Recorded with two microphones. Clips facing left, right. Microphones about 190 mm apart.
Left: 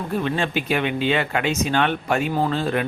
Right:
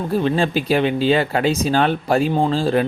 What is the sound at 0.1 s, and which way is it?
Speech, 35° right (ahead or behind).